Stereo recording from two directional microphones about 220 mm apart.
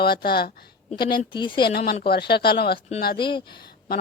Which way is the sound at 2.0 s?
45° left (ahead or behind).